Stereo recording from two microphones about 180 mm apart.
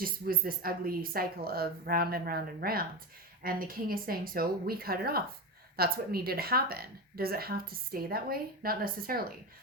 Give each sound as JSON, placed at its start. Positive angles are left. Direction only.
{"t": 0.0, "sound": "a woman's voice", "side_deg": -55}